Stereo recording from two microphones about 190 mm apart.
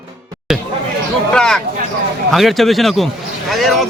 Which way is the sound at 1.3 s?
5° left (ahead or behind).